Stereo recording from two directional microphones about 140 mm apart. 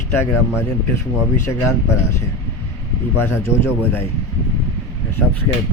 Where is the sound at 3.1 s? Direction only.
20° left (ahead or behind).